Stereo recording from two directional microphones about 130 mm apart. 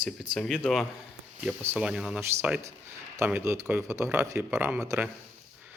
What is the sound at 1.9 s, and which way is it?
Speech, 5° right (ahead or behind).